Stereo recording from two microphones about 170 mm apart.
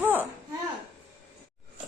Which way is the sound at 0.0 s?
10° right (ahead or behind).